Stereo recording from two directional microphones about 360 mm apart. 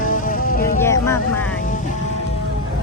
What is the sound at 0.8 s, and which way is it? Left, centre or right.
Vehicle, centre.